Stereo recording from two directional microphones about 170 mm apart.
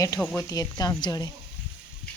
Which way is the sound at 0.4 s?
20° left (ahead or behind).